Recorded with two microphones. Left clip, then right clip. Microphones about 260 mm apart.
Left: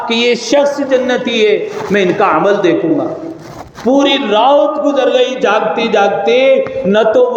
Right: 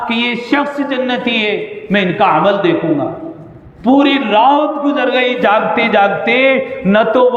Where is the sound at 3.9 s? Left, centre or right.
Right.